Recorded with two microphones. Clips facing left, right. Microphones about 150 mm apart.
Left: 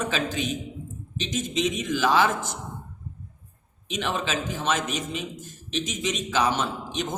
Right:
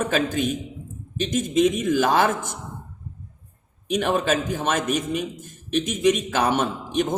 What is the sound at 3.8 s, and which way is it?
A man's voice, 50° right (ahead or behind).